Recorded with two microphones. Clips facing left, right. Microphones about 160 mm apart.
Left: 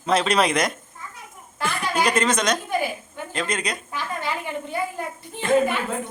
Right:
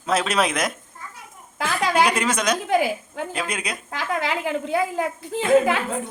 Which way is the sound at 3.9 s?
90° right.